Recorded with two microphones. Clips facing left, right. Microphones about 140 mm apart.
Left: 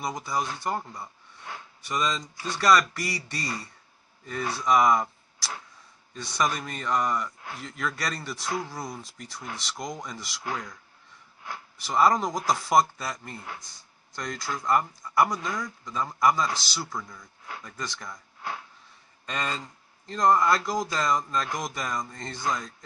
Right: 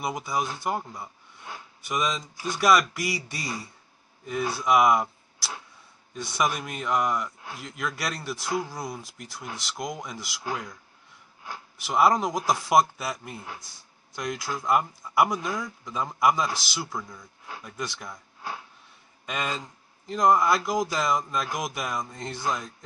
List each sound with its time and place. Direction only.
0.0 s a man's voice: 5° right (ahead or behind)
8.5 s speech: 20° right (ahead or behind)
8.7 s a man's voice: centre (ahead or behind)
11.8 s a man's voice: 5° right (ahead or behind)
13.6 s speech: 20° left (ahead or behind)
14.1 s speech: 5° right (ahead or behind)
15.3 s speech: 20° right (ahead or behind)
19.2 s a man's voice: 10° right (ahead or behind)